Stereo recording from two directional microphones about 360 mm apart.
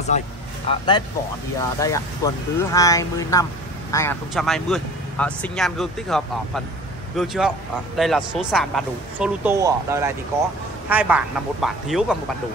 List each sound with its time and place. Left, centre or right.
0.1 s speech: centre